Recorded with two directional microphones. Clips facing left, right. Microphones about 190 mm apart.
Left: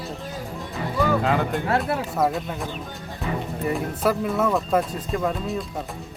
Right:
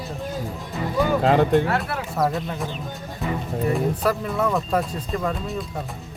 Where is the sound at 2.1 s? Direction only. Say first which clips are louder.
Right 3 dB; centre (ahead or behind).